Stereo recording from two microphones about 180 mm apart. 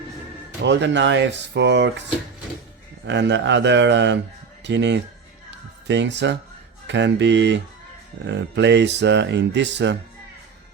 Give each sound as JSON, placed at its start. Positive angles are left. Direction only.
{"t": 0.6, "sound": "speech", "side_deg": -75}
{"t": 3.1, "sound": "speech", "side_deg": -80}